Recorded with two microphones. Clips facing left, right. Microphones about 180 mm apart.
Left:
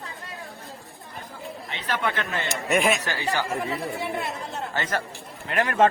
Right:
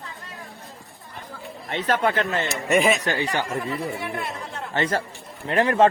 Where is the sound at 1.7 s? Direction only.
45° right (ahead or behind).